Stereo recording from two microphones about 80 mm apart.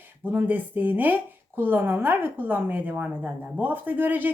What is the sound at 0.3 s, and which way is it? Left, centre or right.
Speech, right.